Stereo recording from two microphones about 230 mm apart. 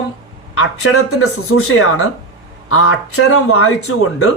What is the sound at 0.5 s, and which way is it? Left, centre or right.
A man's voice, left.